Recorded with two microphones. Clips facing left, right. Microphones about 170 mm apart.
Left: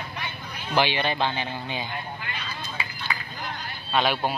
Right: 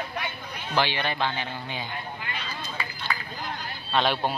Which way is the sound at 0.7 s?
15° left (ahead or behind).